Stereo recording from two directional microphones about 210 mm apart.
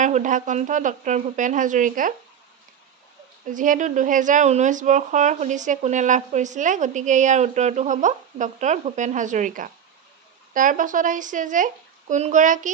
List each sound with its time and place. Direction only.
0.0 s a woman's voice: 35° right (ahead or behind)
3.4 s a woman's voice: 40° right (ahead or behind)